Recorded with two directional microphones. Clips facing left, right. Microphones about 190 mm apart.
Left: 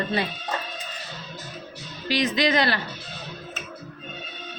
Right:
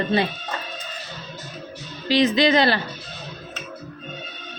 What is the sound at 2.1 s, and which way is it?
Speech, 25° right (ahead or behind).